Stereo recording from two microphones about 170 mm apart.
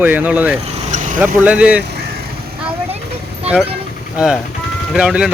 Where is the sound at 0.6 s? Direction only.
40° right (ahead or behind).